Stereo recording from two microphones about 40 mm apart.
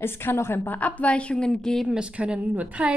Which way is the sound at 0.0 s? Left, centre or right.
Left.